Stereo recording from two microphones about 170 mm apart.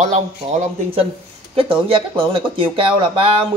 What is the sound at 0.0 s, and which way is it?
Speech, 40° right (ahead or behind).